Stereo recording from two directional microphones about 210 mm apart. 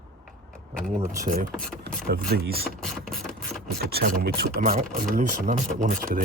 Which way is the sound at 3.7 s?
50° right (ahead or behind).